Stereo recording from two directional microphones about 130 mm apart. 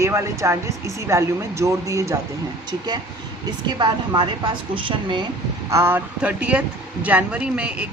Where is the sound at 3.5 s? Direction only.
35° right (ahead or behind).